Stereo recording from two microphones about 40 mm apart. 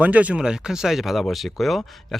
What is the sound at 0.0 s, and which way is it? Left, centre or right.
Speech, right.